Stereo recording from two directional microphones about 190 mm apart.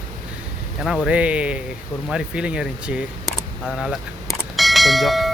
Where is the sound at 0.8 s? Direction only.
5° right (ahead or behind).